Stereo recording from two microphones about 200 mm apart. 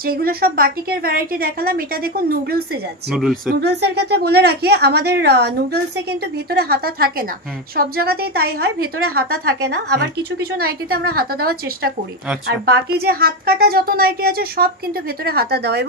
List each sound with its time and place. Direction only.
0.0 s a woman's voice: 50° right (ahead or behind)
3.1 s speech: centre (ahead or behind)
3.4 s a woman's voice: 55° right (ahead or behind)